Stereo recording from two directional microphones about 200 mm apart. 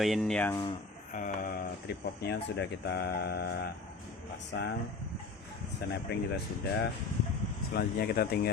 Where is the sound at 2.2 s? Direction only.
55° left (ahead or behind).